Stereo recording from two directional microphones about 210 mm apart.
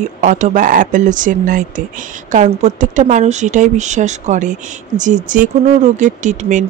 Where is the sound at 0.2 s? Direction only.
35° right (ahead or behind).